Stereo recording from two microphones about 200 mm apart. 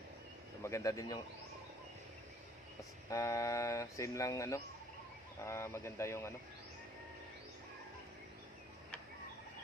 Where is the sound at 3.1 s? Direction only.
15° left (ahead or behind).